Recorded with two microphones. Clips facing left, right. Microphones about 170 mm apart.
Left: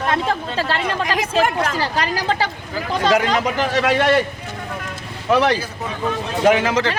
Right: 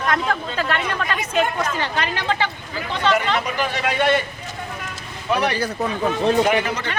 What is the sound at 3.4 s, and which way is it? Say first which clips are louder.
Speech: left 4 dB; 90° left.